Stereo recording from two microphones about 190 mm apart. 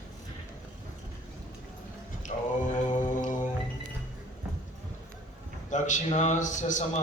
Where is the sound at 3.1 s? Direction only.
40° left (ahead or behind).